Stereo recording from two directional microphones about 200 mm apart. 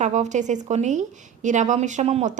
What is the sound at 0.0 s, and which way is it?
A woman's voice, 35° right (ahead or behind).